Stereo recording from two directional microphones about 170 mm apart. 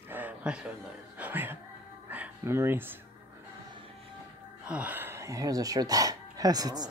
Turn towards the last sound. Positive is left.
turn(degrees=-20)  # may be behind; listen again after turning